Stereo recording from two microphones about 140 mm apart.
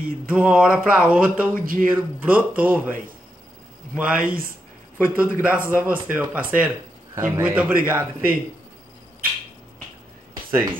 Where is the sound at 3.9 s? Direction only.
10° right (ahead or behind).